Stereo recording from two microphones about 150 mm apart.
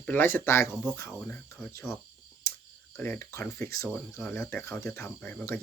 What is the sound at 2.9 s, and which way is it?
Speech, 15° left (ahead or behind).